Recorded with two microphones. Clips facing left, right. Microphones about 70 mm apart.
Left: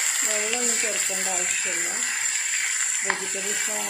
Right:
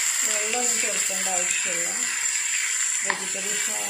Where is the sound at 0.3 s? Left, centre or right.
Left.